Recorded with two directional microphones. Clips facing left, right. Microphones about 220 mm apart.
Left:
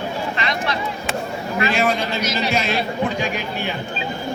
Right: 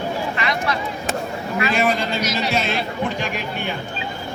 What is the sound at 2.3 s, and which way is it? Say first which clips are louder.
Speech: left 2 dB; centre (ahead or behind).